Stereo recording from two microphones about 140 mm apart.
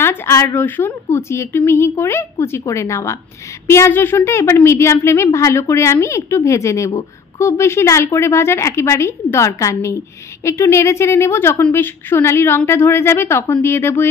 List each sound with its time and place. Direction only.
0.0 s a woman's voice: 15° left (ahead or behind)